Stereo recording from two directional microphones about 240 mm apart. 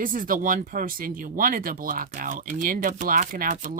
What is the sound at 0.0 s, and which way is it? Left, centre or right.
Speech, right.